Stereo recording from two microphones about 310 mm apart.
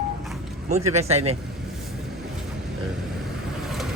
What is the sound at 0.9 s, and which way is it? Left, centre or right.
Speech, centre.